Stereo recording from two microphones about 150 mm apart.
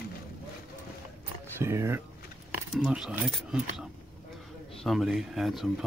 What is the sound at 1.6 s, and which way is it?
Speech, 15° right (ahead or behind).